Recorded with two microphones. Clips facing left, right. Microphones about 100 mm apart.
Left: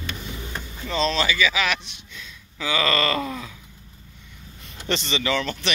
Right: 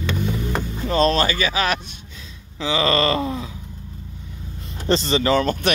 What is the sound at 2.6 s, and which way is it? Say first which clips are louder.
Groan: right 4 dB; 30° right (ahead or behind).